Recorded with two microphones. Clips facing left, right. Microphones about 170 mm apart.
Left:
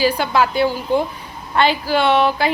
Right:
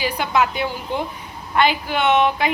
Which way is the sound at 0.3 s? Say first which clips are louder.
Even; 35° left (ahead or behind).